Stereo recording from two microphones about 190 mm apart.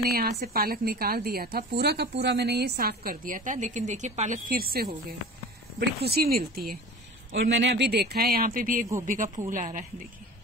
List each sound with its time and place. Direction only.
0.0 s a woman's voice: 55° right (ahead or behind)
7.5 s a woman's voice: 65° right (ahead or behind); by 9.8 s 45° right (ahead or behind)